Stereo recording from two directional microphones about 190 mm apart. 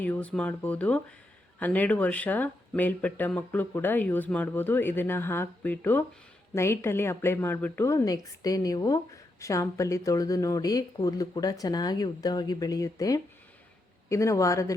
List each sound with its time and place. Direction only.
0.0 s speech: 10° left (ahead or behind)